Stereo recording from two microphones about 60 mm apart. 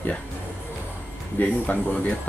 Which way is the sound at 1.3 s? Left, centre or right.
Left.